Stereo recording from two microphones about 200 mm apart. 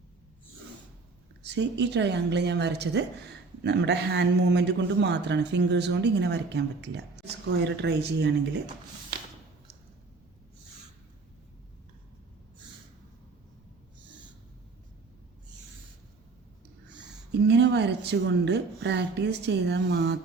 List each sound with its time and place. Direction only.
1.4 s a man's voice: 60° right (ahead or behind)
17.5 s a man's voice: 60° right (ahead or behind)